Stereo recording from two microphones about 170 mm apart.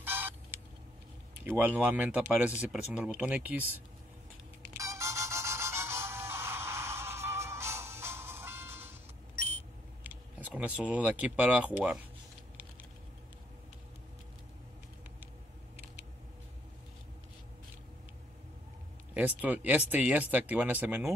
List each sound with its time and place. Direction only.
0.0 s vehicle: 10° right (ahead or behind)
1.6 s speech: 10° right (ahead or behind)
4.7 s music: 20° right (ahead or behind)
10.0 s speech: 10° right (ahead or behind)
19.1 s speech: 10° right (ahead or behind)